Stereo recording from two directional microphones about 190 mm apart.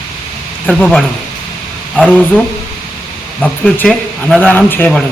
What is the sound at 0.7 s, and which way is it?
Speech, centre (ahead or behind).